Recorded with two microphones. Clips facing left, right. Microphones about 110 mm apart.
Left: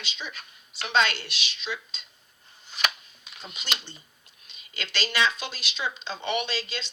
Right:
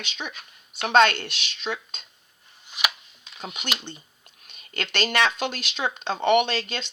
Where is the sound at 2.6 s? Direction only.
15° right (ahead or behind).